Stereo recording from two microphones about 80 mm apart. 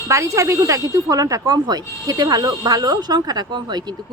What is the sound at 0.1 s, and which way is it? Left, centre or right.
A woman's voice, right.